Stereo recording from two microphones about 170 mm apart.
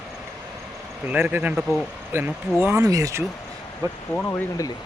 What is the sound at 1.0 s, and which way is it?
Speech, 10° right (ahead or behind).